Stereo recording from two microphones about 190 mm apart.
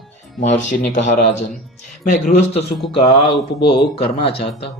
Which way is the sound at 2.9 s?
30° left (ahead or behind).